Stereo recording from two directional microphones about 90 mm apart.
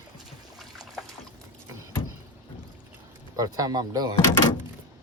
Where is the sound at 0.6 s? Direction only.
5° right (ahead or behind).